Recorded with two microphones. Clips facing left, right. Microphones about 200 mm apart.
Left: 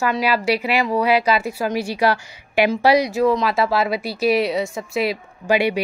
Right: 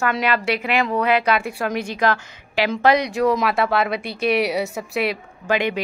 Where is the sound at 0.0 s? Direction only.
5° left (ahead or behind).